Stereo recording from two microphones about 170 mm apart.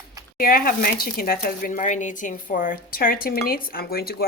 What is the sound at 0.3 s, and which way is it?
Speech, 60° left (ahead or behind).